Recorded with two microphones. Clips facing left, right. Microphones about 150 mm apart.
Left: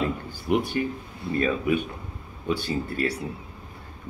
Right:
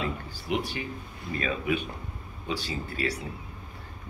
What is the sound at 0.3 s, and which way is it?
Speech, 55° left (ahead or behind).